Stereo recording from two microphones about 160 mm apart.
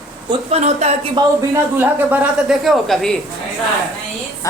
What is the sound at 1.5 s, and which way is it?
Speech, 10° right (ahead or behind).